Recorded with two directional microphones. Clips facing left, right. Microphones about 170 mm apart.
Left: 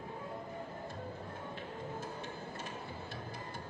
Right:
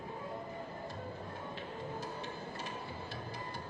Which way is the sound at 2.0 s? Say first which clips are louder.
Right 1 dB; 50° left (ahead or behind).